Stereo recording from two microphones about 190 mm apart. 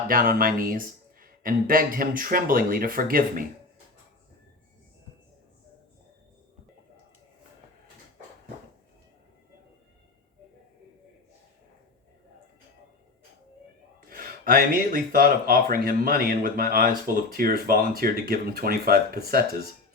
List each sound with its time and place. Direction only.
0.1 s speech: 50° right (ahead or behind)
14.1 s speech: 50° right (ahead or behind)